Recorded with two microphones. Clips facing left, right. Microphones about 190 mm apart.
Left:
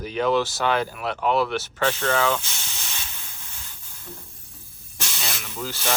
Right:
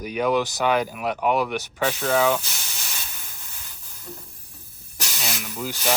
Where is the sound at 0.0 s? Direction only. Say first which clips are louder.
Even; 10° right (ahead or behind).